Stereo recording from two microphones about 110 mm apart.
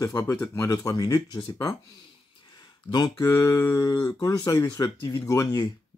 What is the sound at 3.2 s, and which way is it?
Speech, 25° left (ahead or behind).